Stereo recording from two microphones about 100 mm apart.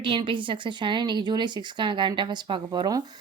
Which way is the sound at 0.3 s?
55° right (ahead or behind).